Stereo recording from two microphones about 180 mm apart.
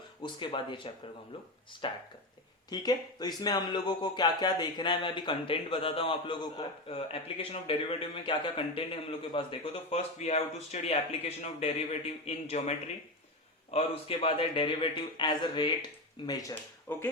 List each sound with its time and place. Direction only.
0.2 s speech: 25° left (ahead or behind)
1.8 s speech: 25° left (ahead or behind)